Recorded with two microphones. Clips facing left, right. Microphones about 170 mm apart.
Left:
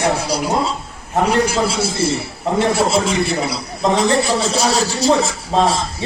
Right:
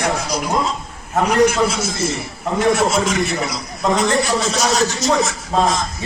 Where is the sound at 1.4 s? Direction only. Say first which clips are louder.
Right 3 dB; 30° left (ahead or behind).